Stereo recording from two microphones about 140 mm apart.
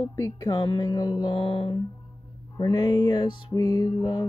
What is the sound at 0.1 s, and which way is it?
Music, 25° left (ahead or behind).